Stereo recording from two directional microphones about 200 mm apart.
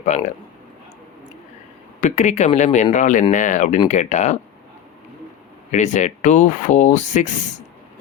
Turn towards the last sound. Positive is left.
turn(degrees=35)  # may be behind; listen again after turning